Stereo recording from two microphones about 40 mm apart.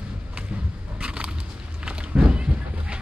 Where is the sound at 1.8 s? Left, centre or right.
Right.